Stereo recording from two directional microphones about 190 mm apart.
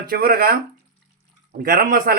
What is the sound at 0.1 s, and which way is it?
A man's voice, 50° right (ahead or behind).